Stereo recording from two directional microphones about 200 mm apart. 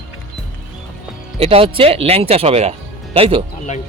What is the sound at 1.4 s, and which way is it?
A man's voice, 30° right (ahead or behind).